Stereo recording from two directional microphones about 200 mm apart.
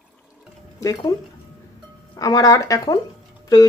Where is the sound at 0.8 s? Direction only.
20° left (ahead or behind).